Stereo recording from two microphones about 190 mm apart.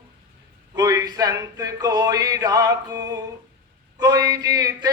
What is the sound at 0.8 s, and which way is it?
Male singing, 20° right (ahead or behind).